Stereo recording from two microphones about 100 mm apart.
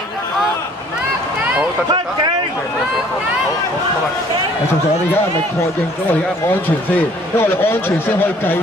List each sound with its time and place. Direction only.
7.0 s a man's voice: 20° left (ahead or behind)